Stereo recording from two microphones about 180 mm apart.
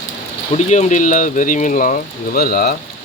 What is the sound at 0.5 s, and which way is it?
Speech, 40° left (ahead or behind).